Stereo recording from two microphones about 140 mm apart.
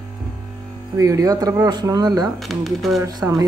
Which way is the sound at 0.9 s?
25° right (ahead or behind).